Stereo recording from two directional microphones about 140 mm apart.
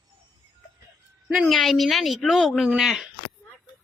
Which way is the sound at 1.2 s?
Centre (ahead or behind).